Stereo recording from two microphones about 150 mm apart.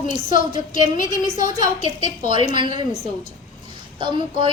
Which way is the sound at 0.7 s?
60° left (ahead or behind).